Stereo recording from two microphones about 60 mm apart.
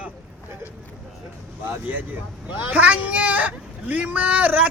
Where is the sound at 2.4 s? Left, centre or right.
Right.